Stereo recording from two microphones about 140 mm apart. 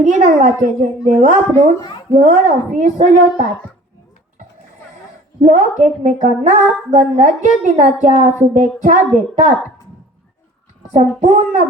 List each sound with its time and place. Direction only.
0.0 s speech: 55° right (ahead or behind)
5.4 s speech: 55° right (ahead or behind)
11.2 s speech: 60° right (ahead or behind)